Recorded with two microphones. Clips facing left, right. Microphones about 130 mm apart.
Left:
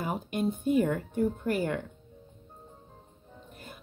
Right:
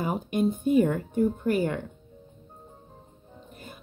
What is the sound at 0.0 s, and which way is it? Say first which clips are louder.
Speech: right 4 dB; 15° right (ahead or behind).